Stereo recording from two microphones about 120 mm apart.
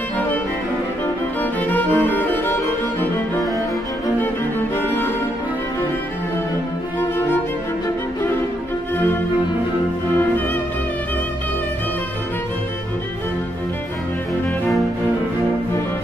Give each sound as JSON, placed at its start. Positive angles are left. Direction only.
{"t": 1.4, "sound": "music", "side_deg": 15}